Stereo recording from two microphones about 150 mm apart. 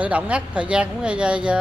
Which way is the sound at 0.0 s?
10° right (ahead or behind).